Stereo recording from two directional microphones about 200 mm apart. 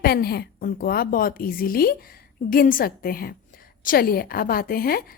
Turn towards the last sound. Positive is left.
turn(degrees=50)  # may be behind; listen again after turning